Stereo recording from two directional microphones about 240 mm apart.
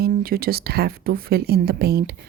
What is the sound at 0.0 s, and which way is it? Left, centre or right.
Speech, right.